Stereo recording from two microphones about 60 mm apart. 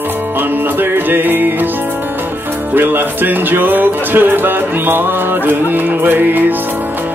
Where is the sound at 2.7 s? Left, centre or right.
Right.